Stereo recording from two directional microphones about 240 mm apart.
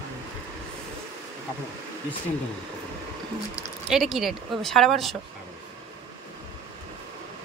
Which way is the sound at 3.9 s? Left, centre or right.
Centre.